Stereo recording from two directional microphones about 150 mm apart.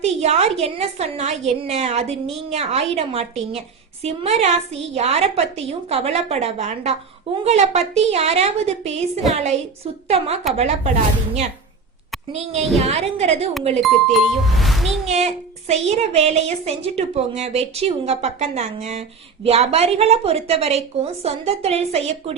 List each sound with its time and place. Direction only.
0.0 s a child's voice: 45° right (ahead or behind)
12.3 s a child's voice: 45° right (ahead or behind)
13.7 s speech: centre (ahead or behind)
15.0 s a child's voice: 50° right (ahead or behind)